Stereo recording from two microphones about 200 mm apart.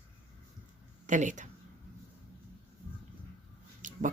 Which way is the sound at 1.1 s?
40° right (ahead or behind).